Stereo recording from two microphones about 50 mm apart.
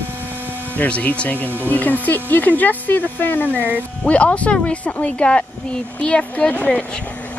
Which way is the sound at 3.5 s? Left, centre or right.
Right.